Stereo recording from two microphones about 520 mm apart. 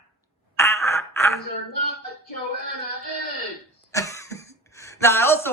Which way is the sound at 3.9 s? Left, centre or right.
Centre.